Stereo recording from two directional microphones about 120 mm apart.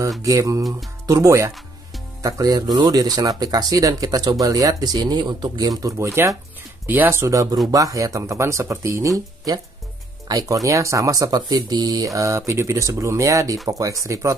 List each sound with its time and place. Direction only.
0.2 s speech: 25° right (ahead or behind)